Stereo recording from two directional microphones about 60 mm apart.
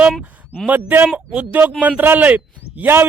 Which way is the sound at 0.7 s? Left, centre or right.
Right.